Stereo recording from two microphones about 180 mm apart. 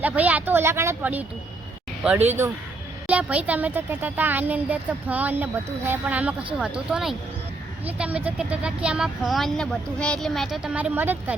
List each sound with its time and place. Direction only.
0.0 s speech: 10° right (ahead or behind)